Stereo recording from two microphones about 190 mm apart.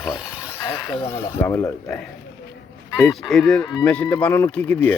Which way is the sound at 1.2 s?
15° left (ahead or behind).